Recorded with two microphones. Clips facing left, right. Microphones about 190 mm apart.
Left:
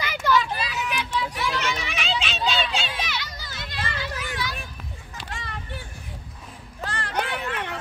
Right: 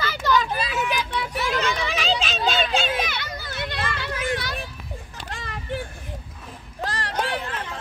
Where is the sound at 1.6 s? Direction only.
35° right (ahead or behind); by 4.5 s 60° right (ahead or behind).